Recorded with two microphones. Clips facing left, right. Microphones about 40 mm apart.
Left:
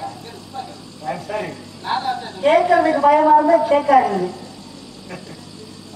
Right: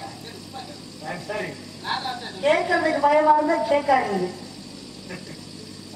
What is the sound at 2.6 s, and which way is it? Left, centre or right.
A woman's voice, centre.